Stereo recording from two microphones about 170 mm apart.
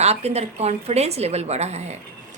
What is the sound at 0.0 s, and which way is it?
A woman's voice, 40° right (ahead or behind).